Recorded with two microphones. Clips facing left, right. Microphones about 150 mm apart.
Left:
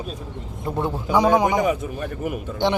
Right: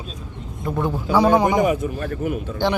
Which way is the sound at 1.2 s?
15° left (ahead or behind).